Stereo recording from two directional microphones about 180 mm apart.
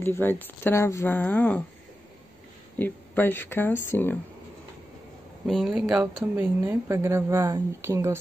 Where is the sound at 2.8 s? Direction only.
10° left (ahead or behind).